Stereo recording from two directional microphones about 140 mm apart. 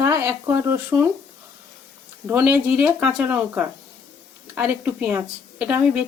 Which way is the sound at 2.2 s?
15° right (ahead or behind).